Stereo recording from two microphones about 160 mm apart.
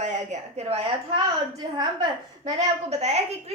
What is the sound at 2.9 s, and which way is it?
Speech, 45° right (ahead or behind).